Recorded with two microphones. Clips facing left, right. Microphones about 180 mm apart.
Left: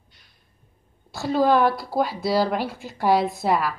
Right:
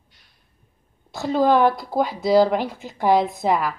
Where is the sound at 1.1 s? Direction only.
20° right (ahead or behind).